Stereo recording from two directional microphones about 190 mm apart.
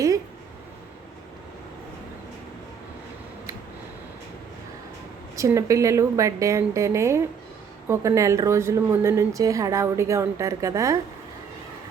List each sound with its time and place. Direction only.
5.4 s a woman's voice: 15° right (ahead or behind)